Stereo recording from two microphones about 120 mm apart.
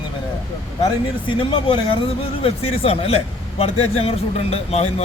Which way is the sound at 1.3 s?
45° left (ahead or behind).